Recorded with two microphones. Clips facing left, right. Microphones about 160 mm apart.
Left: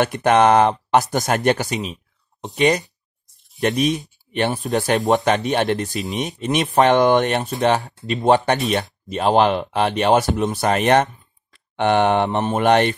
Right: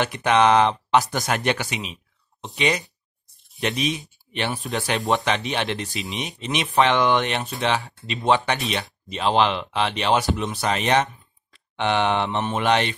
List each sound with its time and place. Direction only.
0.0 s speech: 50° left (ahead or behind)